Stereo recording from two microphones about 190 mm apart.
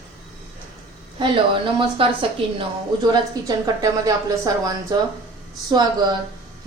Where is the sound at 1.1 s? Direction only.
25° right (ahead or behind).